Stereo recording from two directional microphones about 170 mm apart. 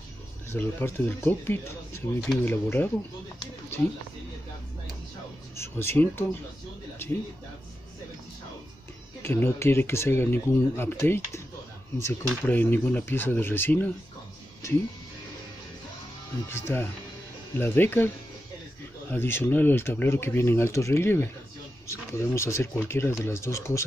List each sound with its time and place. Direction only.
0.5 s speech: 15° left (ahead or behind)
5.6 s speech: 15° left (ahead or behind)
9.2 s speech: 15° left (ahead or behind)
16.4 s speech: 15° left (ahead or behind)